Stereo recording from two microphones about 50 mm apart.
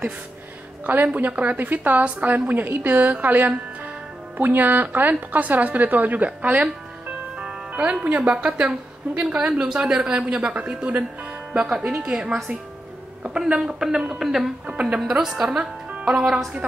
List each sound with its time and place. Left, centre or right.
0.8 s a woman's voice: right
7.7 s a woman's voice: right
11.5 s speech: centre
13.5 s speech: centre
14.7 s a woman's voice: right
15.0 s speech: centre